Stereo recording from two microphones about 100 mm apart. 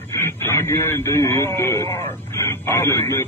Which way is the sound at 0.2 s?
25° left (ahead or behind).